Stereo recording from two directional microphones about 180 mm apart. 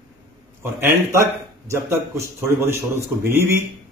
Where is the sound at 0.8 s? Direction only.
15° right (ahead or behind).